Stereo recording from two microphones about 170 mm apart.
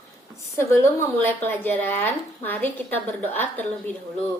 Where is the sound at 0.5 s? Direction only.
15° left (ahead or behind).